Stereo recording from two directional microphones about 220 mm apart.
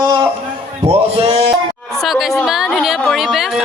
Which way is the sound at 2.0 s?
Centre (ahead or behind).